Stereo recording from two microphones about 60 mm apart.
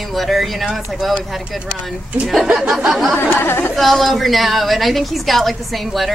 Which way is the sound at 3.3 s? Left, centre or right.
Left.